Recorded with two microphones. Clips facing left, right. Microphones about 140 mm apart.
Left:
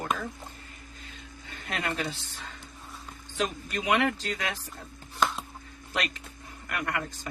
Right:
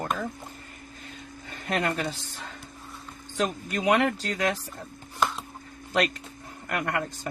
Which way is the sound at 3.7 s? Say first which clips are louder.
Right 3 dB; 45° right (ahead or behind).